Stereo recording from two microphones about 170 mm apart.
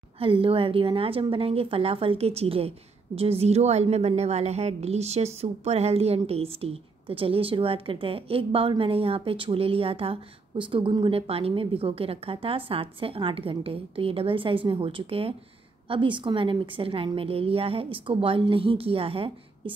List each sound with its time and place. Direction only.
0.2 s a woman's voice: 30° right (ahead or behind)